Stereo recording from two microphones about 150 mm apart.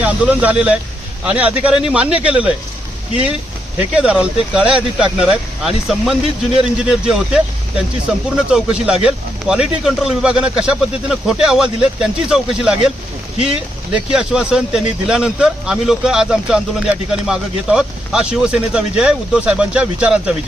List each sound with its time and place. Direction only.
0.0 s speech: 10° right (ahead or behind)
3.9 s speech: 5° right (ahead or behind)